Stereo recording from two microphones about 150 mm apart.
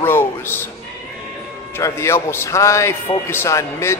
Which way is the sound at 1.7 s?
20° left (ahead or behind).